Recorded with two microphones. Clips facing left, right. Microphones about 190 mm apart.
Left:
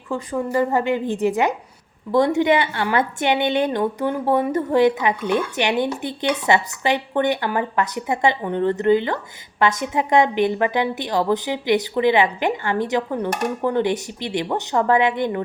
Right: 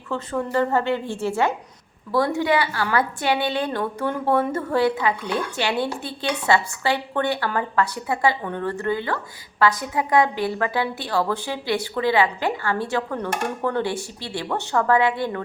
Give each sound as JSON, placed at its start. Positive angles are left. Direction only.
{"t": 0.1, "sound": "a woman's voice", "side_deg": 10}